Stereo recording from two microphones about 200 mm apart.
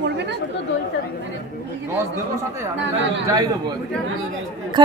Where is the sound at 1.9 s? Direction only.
15° right (ahead or behind).